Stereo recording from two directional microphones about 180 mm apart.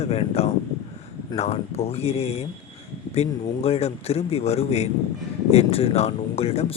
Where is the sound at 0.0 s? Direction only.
35° left (ahead or behind).